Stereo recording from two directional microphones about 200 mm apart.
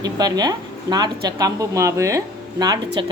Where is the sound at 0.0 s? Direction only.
20° right (ahead or behind).